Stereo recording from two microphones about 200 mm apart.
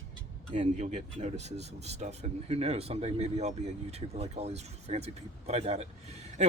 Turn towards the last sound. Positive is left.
turn(degrees=-30)  # may be behind; listen again after turning